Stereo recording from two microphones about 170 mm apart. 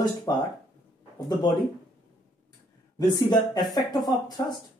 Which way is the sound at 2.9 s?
20° left (ahead or behind).